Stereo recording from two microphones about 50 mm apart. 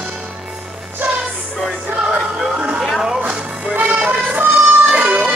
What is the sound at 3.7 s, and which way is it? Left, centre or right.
Music, right.